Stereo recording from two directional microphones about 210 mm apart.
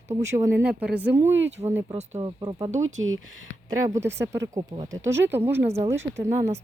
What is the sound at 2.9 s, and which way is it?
Speech, 70° right (ahead or behind).